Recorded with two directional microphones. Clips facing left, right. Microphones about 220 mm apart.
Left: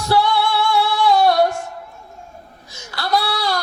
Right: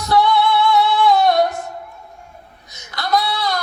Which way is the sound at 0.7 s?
30° left (ahead or behind).